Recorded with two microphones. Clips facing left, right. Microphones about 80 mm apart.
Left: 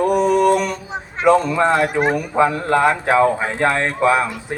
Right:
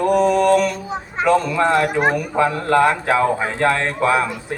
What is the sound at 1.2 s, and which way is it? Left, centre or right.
A man's voice, left.